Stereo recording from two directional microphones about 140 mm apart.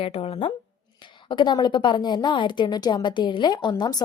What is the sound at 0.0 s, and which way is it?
A woman's voice, 40° left (ahead or behind).